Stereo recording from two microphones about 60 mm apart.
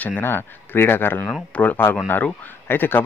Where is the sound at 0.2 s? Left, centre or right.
Left.